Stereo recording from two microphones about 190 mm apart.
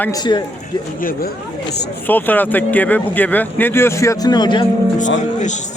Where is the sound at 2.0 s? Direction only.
10° left (ahead or behind).